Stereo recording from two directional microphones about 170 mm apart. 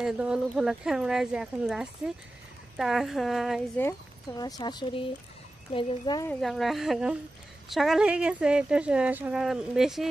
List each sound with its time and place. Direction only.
0.0 s speech: 5° right (ahead or behind)
4.4 s a woman's voice: 25° left (ahead or behind)
6.4 s speech: centre (ahead or behind)